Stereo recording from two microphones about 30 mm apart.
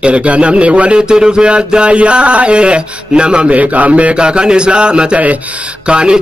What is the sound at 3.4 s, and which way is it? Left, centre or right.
Speech, right.